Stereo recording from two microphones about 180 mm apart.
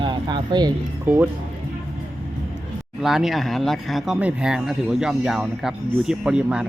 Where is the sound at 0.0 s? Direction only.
25° right (ahead or behind).